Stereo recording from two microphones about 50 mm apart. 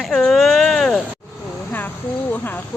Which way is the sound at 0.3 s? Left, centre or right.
Centre.